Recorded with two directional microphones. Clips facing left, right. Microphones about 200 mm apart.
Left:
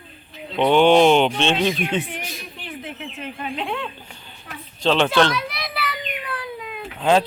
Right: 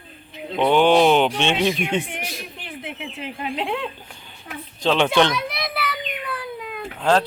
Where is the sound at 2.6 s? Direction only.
10° right (ahead or behind).